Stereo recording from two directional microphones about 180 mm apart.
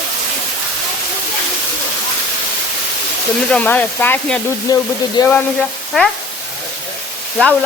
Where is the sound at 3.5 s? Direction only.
10° left (ahead or behind).